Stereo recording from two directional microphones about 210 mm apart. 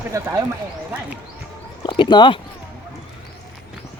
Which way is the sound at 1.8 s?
20° left (ahead or behind).